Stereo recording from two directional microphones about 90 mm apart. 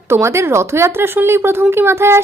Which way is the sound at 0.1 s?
30° right (ahead or behind).